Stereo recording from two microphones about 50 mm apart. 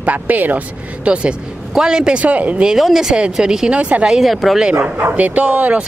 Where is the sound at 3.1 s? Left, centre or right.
Centre.